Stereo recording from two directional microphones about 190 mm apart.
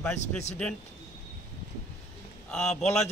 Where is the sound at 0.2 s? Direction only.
35° left (ahead or behind).